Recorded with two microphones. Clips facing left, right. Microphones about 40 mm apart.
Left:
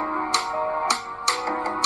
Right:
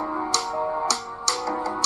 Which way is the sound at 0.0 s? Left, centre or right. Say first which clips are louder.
Left 2 dB; left.